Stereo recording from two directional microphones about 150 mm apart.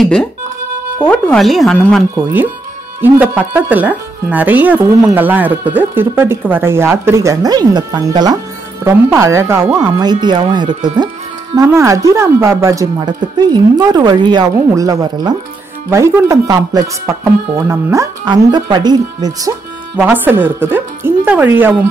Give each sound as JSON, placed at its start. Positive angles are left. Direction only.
{"t": 0.0, "sound": "speech", "side_deg": 5}
{"t": 3.0, "sound": "speech", "side_deg": -10}
{"t": 9.9, "sound": "speech", "side_deg": -30}
{"t": 20.0, "sound": "speech", "side_deg": -10}